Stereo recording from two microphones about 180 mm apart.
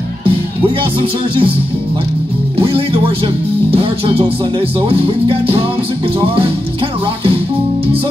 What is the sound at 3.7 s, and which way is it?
Music, 30° right (ahead or behind).